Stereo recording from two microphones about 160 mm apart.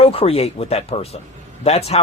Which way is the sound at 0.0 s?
40° left (ahead or behind).